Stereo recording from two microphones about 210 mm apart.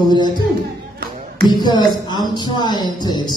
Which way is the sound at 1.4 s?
20° left (ahead or behind).